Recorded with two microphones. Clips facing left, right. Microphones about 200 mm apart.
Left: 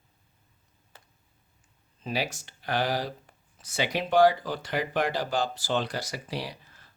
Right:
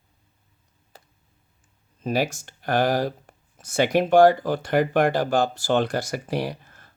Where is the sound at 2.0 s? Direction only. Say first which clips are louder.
Right 7 dB; 45° right (ahead or behind).